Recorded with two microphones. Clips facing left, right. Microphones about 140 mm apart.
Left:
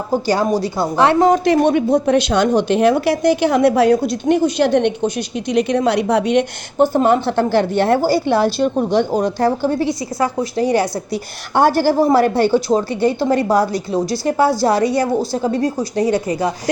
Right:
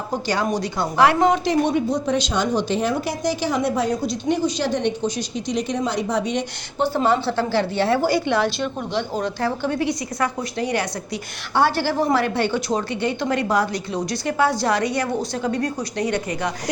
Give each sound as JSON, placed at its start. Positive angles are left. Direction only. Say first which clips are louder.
{"t": 0.1, "sound": "a woman's voice", "louder": "left 6 dB", "side_deg": 35}
{"t": 1.5, "sound": "a woman's voice", "louder": "left 6 dB", "side_deg": 60}
{"t": 6.8, "sound": "a woman's voice", "louder": "left 5 dB", "side_deg": 50}
{"t": 8.0, "sound": "a woman's voice", "louder": "left 5 dB", "side_deg": 35}